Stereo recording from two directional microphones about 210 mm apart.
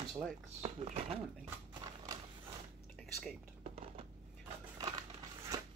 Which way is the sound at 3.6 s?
30° right (ahead or behind).